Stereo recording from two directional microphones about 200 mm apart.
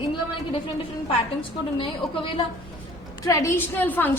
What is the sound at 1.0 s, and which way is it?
A woman's voice, 25° left (ahead or behind).